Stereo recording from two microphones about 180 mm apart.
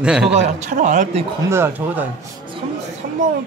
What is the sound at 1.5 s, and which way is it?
Speech, 10° right (ahead or behind).